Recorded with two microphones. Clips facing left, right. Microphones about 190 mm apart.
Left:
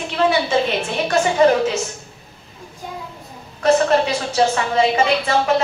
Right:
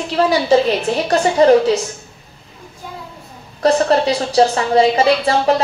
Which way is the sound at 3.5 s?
35° right (ahead or behind).